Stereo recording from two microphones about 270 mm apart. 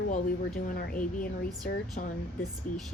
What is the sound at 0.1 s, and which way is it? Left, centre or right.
Speech, left.